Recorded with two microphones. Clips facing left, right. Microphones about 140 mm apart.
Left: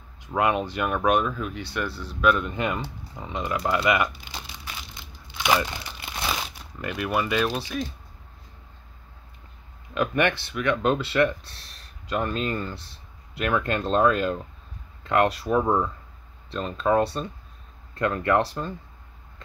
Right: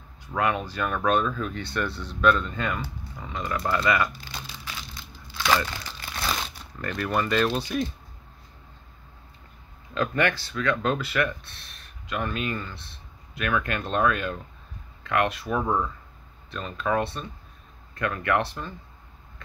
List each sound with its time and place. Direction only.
0.2 s speech: 20° left (ahead or behind)
6.3 s speech: 5° left (ahead or behind)
9.9 s speech: 20° left (ahead or behind)